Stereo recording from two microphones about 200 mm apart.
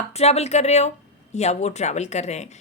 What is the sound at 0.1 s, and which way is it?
Speech, 30° left (ahead or behind).